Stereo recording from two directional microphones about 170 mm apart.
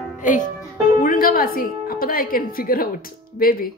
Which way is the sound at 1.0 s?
55° left (ahead or behind).